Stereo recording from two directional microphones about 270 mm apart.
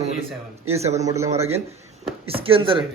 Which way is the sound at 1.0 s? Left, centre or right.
Centre.